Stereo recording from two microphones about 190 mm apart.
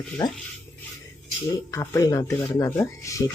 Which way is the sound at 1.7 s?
15° left (ahead or behind).